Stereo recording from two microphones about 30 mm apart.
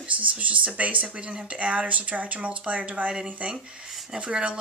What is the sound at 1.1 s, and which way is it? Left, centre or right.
Speech, right.